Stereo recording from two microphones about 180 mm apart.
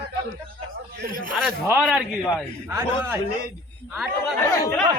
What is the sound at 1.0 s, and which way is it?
Speech, 50° right (ahead or behind).